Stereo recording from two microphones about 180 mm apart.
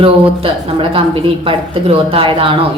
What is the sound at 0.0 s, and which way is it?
Speech, 30° right (ahead or behind).